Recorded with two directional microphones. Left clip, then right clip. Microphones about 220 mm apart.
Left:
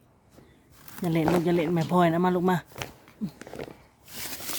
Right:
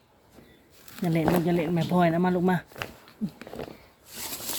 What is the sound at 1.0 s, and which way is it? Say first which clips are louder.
Speech: even; 10° left (ahead or behind).